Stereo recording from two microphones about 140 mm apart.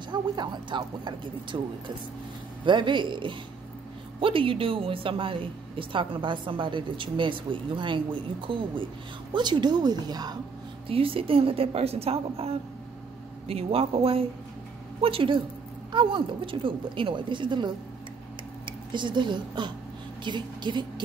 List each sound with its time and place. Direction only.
0.1 s speech: 35° right (ahead or behind)
2.6 s speech: 35° right (ahead or behind)
10.9 s a woman's voice: 40° right (ahead or behind)
18.7 s a woman's voice: 35° right (ahead or behind)